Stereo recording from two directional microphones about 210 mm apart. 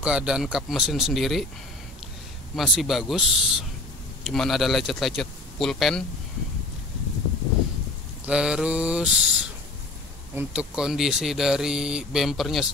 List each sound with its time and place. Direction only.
0.0 s speech: 5° right (ahead or behind)
2.5 s speech: centre (ahead or behind)
8.3 s speech: 5° right (ahead or behind)